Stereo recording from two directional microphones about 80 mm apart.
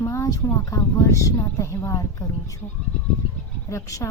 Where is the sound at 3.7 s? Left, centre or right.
Left.